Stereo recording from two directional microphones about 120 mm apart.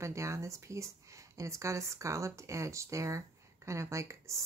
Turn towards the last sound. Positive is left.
turn(degrees=-25)  # may be behind; listen again after turning